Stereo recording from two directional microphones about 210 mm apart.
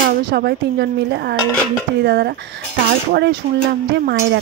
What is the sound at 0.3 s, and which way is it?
Speech, 50° right (ahead or behind).